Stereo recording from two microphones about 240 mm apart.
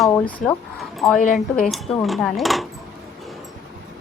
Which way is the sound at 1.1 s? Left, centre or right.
Left.